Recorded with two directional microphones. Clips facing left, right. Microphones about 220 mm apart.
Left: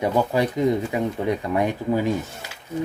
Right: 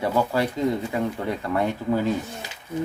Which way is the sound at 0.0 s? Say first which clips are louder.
Left 2 dB; 15° left (ahead or behind).